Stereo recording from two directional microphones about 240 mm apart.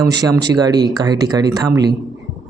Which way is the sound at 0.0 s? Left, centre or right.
Centre.